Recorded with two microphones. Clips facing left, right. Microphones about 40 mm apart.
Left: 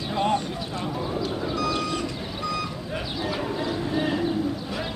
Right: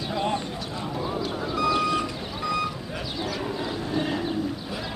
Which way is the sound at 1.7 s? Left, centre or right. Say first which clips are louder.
Right 3 dB; centre.